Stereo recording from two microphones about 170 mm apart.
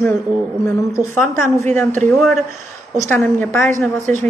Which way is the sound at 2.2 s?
Centre (ahead or behind).